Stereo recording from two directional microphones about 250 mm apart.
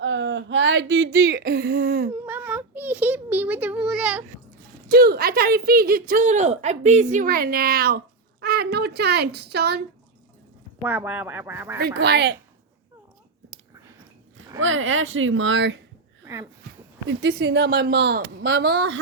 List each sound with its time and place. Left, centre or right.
0.0 s a sound: right
1.4 s a woman's voice: right
2.1 s a child's voice: centre
4.9 s a woman's voice: right
10.8 s speech: centre
11.8 s a woman's voice: right
14.6 s a woman's voice: right
16.2 s a sound: centre
17.1 s a woman's voice: right